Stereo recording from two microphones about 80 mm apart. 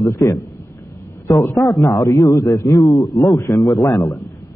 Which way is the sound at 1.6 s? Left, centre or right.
Left.